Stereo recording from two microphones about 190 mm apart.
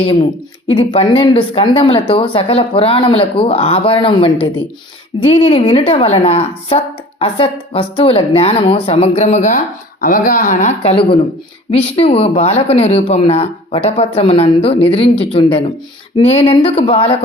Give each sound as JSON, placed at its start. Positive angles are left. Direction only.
{"t": 0.7, "sound": "a woman's voice", "side_deg": 30}